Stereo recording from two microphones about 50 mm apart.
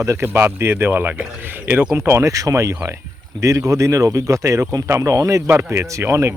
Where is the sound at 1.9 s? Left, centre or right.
Right.